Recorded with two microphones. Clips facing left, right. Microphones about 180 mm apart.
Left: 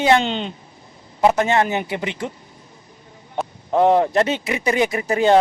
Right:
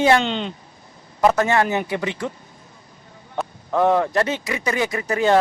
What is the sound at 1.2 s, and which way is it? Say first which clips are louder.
Speech: left 1 dB; 20° left (ahead or behind).